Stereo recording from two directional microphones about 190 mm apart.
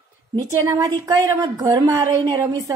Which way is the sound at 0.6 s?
15° right (ahead or behind).